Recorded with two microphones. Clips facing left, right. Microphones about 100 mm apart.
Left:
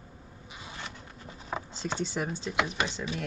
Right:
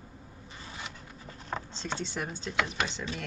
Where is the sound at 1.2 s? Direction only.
5° left (ahead or behind).